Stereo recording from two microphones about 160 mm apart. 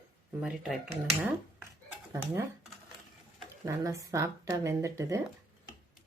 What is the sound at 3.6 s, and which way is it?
Speech, 20° right (ahead or behind).